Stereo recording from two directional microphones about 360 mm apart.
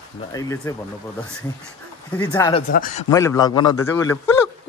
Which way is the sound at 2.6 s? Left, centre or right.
Left.